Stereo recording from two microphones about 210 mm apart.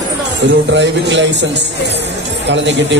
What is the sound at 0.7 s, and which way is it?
Speech, 60° right (ahead or behind).